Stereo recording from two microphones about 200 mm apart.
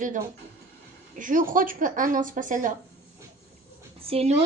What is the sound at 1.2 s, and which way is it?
Speech, 40° right (ahead or behind).